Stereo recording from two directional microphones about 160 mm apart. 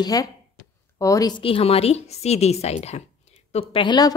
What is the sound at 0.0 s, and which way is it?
A woman's voice, 25° left (ahead or behind).